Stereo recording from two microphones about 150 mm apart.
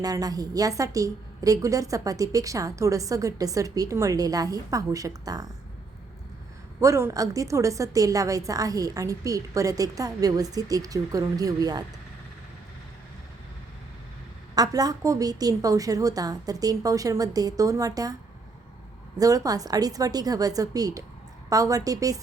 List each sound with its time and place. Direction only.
0.0 s a woman's voice: 25° right (ahead or behind)
6.7 s a woman's voice: 20° right (ahead or behind)
14.5 s a woman's voice: 25° right (ahead or behind)